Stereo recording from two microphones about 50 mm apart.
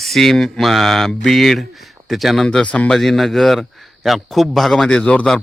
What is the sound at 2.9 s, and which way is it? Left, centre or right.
Speech, centre.